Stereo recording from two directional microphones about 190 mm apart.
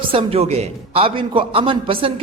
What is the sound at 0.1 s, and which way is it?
A man's voice, 30° right (ahead or behind).